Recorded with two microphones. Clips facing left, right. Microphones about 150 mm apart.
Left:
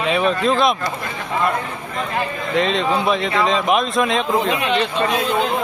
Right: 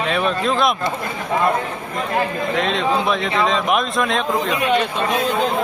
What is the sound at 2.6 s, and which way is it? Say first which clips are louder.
A man's voice: left 2 dB; centre (ahead or behind).